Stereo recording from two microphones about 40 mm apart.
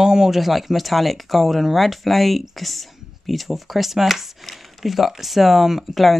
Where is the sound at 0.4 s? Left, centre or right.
Centre.